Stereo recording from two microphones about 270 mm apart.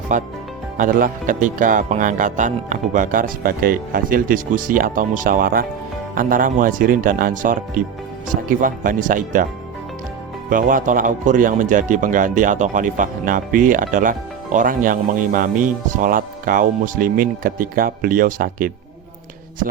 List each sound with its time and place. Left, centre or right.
0.1 s speech: right
10.5 s speech: right